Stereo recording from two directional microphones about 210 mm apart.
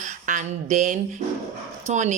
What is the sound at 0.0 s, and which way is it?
Speech, 35° right (ahead or behind).